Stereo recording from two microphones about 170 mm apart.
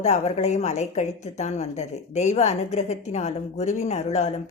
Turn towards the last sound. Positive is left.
turn(degrees=45)  # may be behind; listen again after turning